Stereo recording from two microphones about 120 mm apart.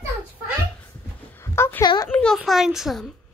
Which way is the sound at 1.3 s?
20° left (ahead or behind).